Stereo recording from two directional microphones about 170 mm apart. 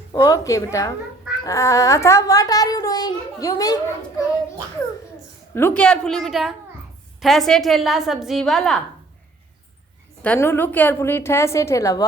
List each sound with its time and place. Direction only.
0.1 s a child's voice: 20° left (ahead or behind)
5.5 s a woman's voice: 10° left (ahead or behind)
10.2 s a woman's voice: 15° left (ahead or behind)